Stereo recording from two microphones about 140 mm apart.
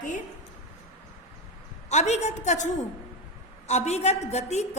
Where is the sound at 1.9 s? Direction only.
55° left (ahead or behind).